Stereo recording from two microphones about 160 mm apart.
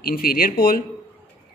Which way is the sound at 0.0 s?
70° left (ahead or behind).